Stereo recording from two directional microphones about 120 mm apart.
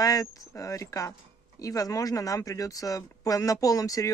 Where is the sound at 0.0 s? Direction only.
30° left (ahead or behind).